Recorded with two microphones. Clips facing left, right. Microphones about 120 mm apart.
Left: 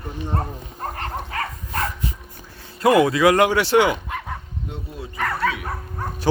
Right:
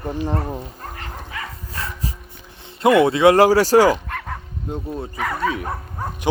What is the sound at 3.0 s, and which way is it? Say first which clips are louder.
Speech: right 4 dB; 30° right (ahead or behind).